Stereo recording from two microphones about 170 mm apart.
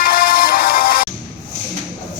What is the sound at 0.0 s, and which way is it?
Music, 60° left (ahead or behind).